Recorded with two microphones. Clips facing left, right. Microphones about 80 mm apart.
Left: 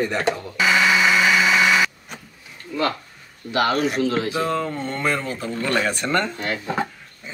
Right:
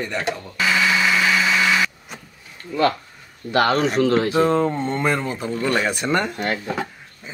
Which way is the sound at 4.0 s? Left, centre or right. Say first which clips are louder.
Right 5 dB; right.